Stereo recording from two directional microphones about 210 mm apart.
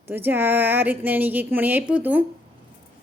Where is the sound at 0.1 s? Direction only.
10° right (ahead or behind).